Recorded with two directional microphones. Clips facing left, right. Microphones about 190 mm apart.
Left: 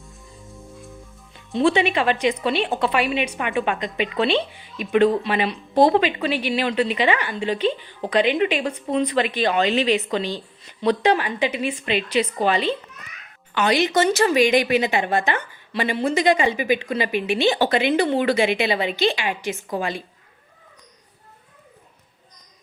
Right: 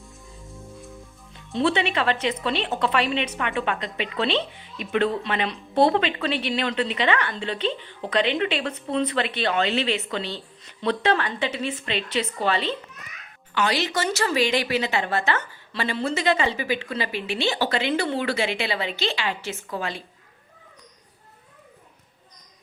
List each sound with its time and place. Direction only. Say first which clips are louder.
1.5 s a woman's voice: left 4 dB; 15° left (ahead or behind)